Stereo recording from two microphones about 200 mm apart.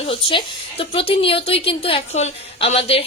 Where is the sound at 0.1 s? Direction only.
25° left (ahead or behind).